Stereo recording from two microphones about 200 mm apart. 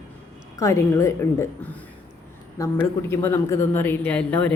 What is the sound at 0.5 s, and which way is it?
Speech, 15° left (ahead or behind).